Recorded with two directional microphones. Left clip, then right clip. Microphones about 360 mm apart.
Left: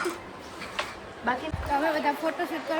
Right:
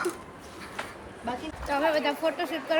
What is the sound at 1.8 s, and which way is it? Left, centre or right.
Speech, centre.